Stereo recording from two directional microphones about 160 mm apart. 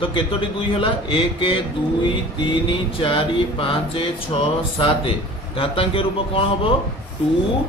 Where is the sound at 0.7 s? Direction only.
35° left (ahead or behind).